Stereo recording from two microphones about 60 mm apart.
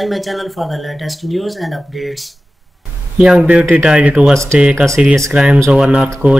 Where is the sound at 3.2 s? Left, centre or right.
Centre.